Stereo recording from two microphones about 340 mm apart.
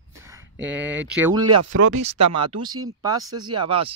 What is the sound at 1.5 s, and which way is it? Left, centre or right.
Speech, right.